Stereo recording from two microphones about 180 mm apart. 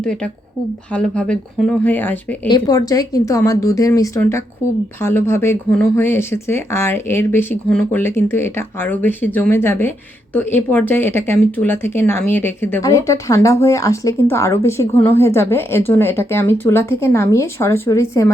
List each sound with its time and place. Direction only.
0.0 s a woman's voice: 5° left (ahead or behind)
2.5 s speech: 20° left (ahead or behind)